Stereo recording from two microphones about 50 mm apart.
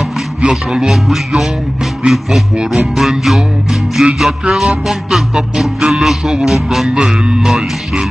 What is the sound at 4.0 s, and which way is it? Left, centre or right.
Music, centre.